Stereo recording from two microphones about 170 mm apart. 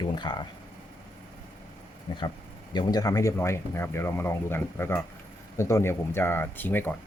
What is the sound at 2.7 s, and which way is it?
Speech, 25° left (ahead or behind).